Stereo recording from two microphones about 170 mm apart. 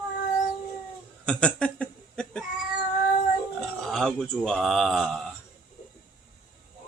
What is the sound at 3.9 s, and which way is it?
Speech, centre (ahead or behind).